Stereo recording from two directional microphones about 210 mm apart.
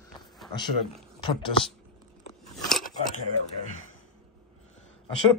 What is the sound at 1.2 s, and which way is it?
Speech, 25° left (ahead or behind).